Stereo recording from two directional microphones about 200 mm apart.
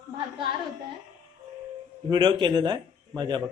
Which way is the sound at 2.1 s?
20° right (ahead or behind).